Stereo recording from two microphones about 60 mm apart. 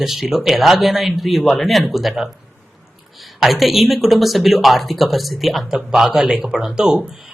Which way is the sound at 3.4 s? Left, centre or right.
Centre.